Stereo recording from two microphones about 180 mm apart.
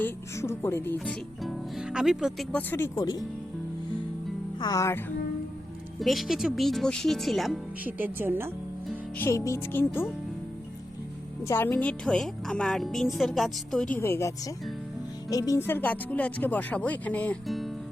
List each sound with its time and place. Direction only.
0.0 s speech: 15° left (ahead or behind)
0.9 s speech: centre (ahead or behind); by 3.2 s 20° left (ahead or behind)
4.6 s speech: 20° left (ahead or behind)
6.0 s speech: centre (ahead or behind)
9.1 s speech: 15° left (ahead or behind)
11.4 s speech: 15° left (ahead or behind)
13.9 s speech: 15° left (ahead or behind)